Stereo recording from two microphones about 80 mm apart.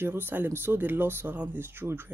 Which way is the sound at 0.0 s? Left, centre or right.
Right.